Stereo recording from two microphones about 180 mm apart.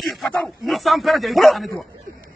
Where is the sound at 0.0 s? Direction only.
Centre (ahead or behind).